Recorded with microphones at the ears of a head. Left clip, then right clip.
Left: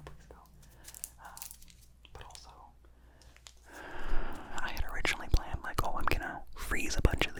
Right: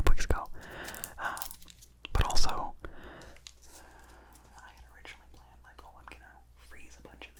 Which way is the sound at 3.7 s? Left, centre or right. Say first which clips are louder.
Left 11 dB; left.